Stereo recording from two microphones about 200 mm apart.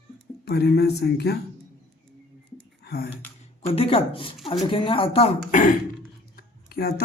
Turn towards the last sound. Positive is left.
turn(degrees=50)  # may be behind; listen again after turning